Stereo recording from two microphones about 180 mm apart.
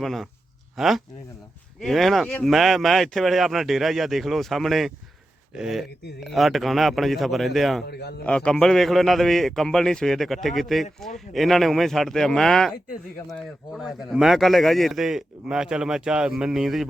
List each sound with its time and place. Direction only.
0.0 s speech: centre (ahead or behind)
7.9 s a man's voice: 65° left (ahead or behind)
8.2 s speech: 5° left (ahead or behind)